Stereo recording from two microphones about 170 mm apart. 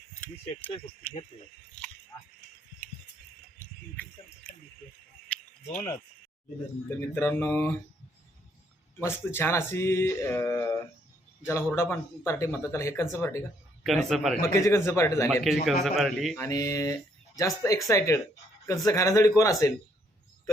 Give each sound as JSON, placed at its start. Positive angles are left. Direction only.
{"t": 3.9, "sound": "speech", "side_deg": 10}
{"t": 5.3, "sound": "cricket", "side_deg": 10}
{"t": 5.7, "sound": "speech", "side_deg": 20}
{"t": 9.0, "sound": "speech", "side_deg": 15}
{"t": 13.8, "sound": "a man's voice", "side_deg": 0}
{"t": 14.4, "sound": "speech", "side_deg": 15}
{"t": 15.3, "sound": "a man's voice", "side_deg": 0}
{"t": 16.4, "sound": "speech", "side_deg": 20}